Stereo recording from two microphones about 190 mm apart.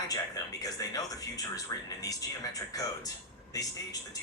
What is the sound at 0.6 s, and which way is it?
Speech, 20° left (ahead or behind).